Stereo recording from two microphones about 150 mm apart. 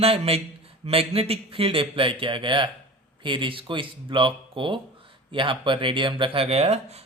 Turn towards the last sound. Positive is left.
turn(degrees=-45)  # may be behind; listen again after turning